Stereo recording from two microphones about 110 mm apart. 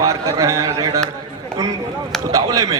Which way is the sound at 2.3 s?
35° right (ahead or behind).